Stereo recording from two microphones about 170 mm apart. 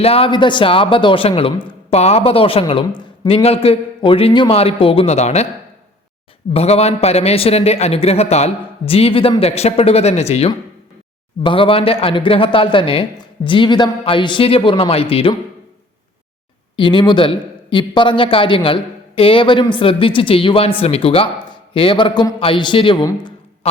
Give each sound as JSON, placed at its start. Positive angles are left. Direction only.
{"t": 0.0, "sound": "a man's voice", "side_deg": 35}
{"t": 6.5, "sound": "a man's voice", "side_deg": 35}
{"t": 16.7, "sound": "a man's voice", "side_deg": 30}